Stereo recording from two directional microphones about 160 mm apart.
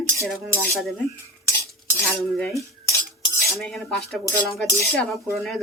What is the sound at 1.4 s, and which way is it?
Stir, 15° left (ahead or behind).